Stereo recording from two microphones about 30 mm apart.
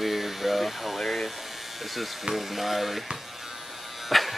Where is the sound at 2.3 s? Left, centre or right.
Centre.